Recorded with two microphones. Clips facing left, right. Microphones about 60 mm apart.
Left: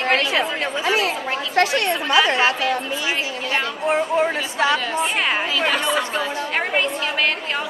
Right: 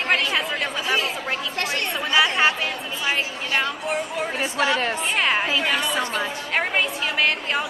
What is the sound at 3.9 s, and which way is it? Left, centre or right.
Speech, left.